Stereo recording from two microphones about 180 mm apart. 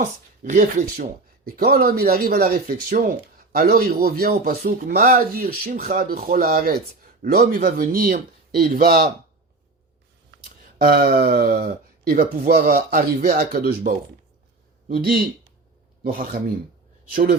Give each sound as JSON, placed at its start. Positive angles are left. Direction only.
{"t": 0.5, "sound": "speech", "side_deg": -45}
{"t": 1.5, "sound": "speech", "side_deg": -55}
{"t": 10.8, "sound": "speech", "side_deg": -60}
{"t": 16.1, "sound": "speech", "side_deg": -50}